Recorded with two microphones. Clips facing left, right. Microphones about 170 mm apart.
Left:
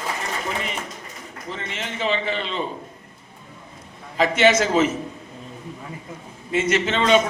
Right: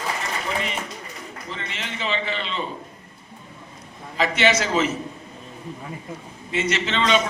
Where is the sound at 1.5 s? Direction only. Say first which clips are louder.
Left 4 dB; 50° left (ahead or behind).